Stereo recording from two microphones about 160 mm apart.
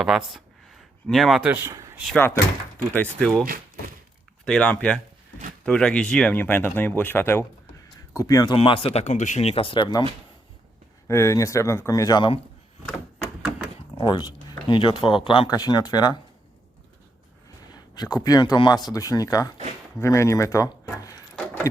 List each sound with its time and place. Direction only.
0.0 s speech: centre (ahead or behind)
2.7 s speech: 10° left (ahead or behind)
3.4 s a sound: 65° right (ahead or behind)
4.4 s speech: 5° left (ahead or behind)
8.5 s speech: 35° left (ahead or behind)
11.1 s speech: 15° left (ahead or behind)
14.0 s speech: 25° left (ahead or behind)
17.7 s speech: 25° left (ahead or behind)
21.3 s keys jangling: 10° left (ahead or behind)